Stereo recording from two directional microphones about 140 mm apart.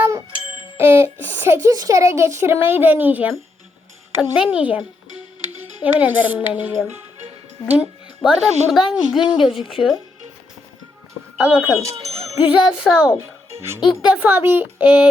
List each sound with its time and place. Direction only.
0.8 s a sound: 15° right (ahead or behind)
1.3 s a child's voice: 15° right (ahead or behind)
5.8 s a child's voice: 10° right (ahead or behind)
11.3 s speech: 5° right (ahead or behind)
11.8 s speech: 25° right (ahead or behind)
12.3 s music: 15° right (ahead or behind)
12.6 s a child's voice: 5° right (ahead or behind)